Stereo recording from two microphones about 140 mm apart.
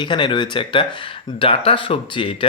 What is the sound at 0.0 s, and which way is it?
Speech, 35° left (ahead or behind).